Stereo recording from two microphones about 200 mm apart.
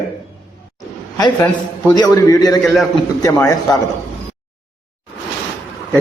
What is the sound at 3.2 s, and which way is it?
Speech, 15° left (ahead or behind).